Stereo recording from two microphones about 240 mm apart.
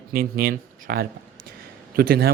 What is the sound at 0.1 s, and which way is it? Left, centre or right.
A man's voice, right.